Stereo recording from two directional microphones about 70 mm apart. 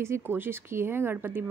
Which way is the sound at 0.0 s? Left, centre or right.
Right.